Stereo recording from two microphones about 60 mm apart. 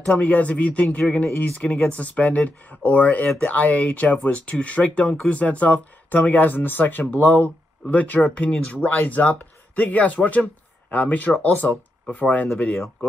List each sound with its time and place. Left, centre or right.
0.0 s speech: left